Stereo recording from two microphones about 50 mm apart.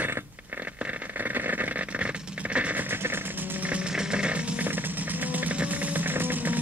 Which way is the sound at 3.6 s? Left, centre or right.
Right.